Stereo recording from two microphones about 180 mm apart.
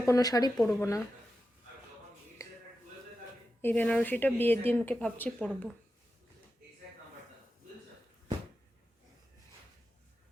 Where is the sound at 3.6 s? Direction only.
10° left (ahead or behind).